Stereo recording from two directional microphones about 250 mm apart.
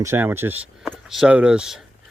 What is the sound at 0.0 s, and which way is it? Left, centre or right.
Speech, centre.